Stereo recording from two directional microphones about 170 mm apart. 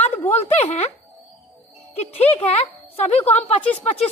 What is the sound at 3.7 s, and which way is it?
Speech, 40° left (ahead or behind).